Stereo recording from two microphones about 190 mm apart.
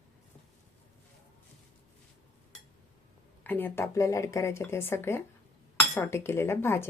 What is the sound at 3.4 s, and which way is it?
Speech, 10° left (ahead or behind).